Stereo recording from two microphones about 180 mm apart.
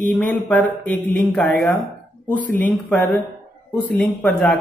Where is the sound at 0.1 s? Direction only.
10° left (ahead or behind).